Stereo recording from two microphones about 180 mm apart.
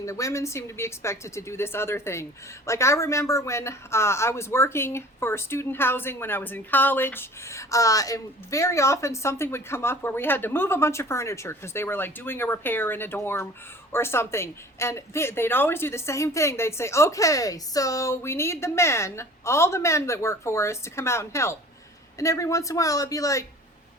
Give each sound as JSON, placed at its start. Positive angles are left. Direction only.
{"t": 0.0, "sound": "speech", "side_deg": 15}